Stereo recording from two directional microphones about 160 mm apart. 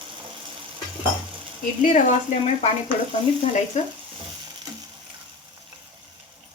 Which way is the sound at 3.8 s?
50° left (ahead or behind).